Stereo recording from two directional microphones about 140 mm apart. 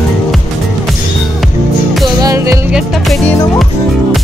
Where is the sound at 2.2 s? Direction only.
20° right (ahead or behind).